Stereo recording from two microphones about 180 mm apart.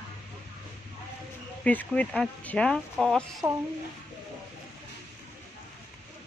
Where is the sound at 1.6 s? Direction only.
10° left (ahead or behind).